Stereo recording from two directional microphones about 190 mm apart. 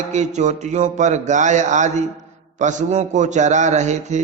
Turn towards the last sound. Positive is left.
turn(degrees=-40)  # may be behind; listen again after turning